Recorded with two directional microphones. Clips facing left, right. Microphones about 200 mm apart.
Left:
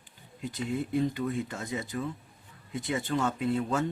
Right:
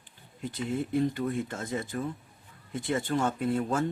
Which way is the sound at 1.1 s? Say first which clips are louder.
Right 1 dB; 50° right (ahead or behind).